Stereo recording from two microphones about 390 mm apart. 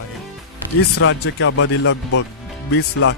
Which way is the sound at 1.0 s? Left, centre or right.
Left.